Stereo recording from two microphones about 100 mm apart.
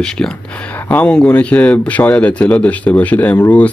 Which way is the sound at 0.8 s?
15° left (ahead or behind).